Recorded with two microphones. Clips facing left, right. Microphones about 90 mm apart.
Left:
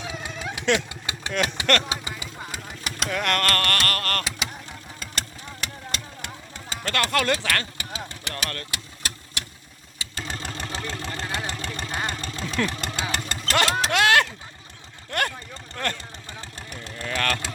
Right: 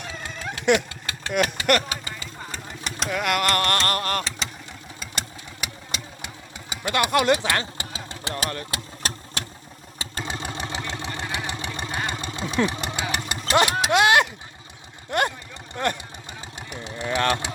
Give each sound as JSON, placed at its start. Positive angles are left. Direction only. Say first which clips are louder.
{"t": 0.0, "sound": "a sound", "louder": "left 2 dB", "side_deg": 10}
{"t": 0.6, "sound": "speech", "louder": "right 3 dB", "side_deg": -15}
{"t": 1.9, "sound": "vehicle", "louder": "left 1 dB", "side_deg": 15}
{"t": 3.4, "sound": "a sound", "louder": "right 2 dB", "side_deg": -20}
{"t": 4.2, "sound": "vehicle", "louder": "even", "side_deg": 5}
{"t": 4.9, "sound": "engine", "louder": "right 1 dB", "side_deg": -5}
{"t": 10.2, "sound": "vehicle", "louder": "right 2 dB", "side_deg": -15}
{"t": 15.1, "sound": "speech", "louder": "right 3 dB", "side_deg": -15}
{"t": 16.6, "sound": "a sound", "louder": "right 5 dB", "side_deg": -20}